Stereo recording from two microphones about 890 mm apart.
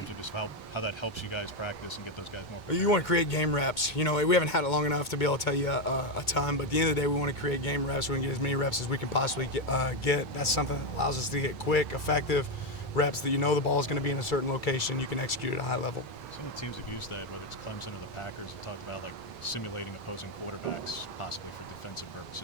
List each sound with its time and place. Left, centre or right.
0.3 s speech: left
2.6 s speech: left
19.5 s speech: left